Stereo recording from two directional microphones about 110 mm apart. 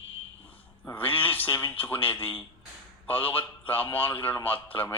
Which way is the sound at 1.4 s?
25° left (ahead or behind).